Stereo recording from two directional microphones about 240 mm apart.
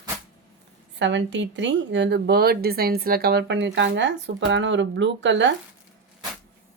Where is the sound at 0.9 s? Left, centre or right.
Right.